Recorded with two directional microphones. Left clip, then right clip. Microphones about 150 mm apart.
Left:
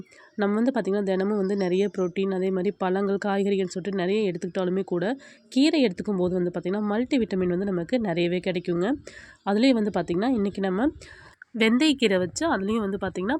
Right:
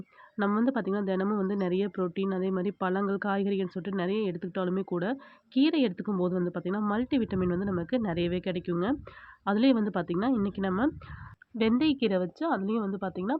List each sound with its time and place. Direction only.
0.3 s speech: 20° left (ahead or behind)